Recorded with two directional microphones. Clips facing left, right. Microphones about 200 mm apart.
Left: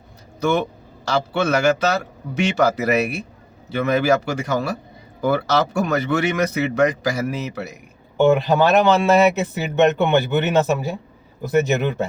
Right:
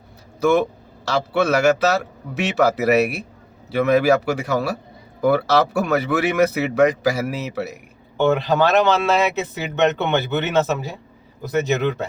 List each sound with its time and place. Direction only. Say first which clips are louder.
0.3 s a man's voice: right 3 dB; centre (ahead or behind)
8.2 s a man's voice: left 2 dB; 15° left (ahead or behind)